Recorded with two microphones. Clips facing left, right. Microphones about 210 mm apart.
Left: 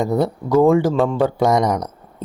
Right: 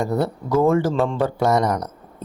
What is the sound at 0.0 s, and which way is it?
Speech, 15° left (ahead or behind).